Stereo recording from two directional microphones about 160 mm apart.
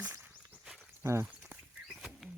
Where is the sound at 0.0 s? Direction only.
10° right (ahead or behind).